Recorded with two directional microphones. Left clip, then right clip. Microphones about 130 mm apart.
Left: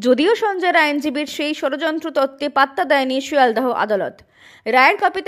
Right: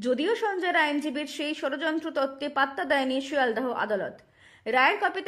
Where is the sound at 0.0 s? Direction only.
50° left (ahead or behind).